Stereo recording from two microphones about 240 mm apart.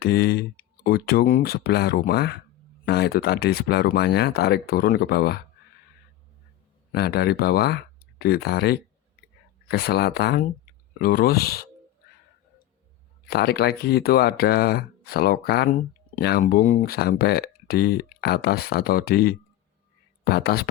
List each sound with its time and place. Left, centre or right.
0.0 s speech: left
6.9 s speech: left
13.2 s speech: left